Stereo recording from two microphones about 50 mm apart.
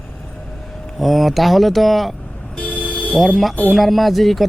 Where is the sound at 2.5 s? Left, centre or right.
Left.